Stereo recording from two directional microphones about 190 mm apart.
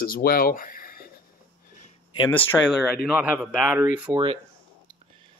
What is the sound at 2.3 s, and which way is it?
Speech, 10° left (ahead or behind).